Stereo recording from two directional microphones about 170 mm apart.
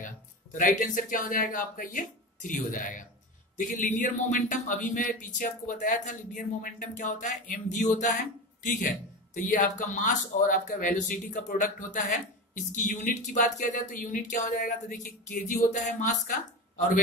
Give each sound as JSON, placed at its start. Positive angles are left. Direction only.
{"t": 0.0, "sound": "speech", "side_deg": 50}